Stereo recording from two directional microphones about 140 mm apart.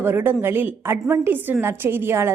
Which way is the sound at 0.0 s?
15° right (ahead or behind).